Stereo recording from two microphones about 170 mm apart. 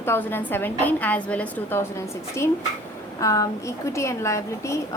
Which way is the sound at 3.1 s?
20° left (ahead or behind).